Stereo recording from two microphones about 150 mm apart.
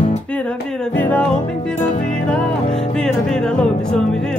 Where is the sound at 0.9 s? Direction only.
10° left (ahead or behind).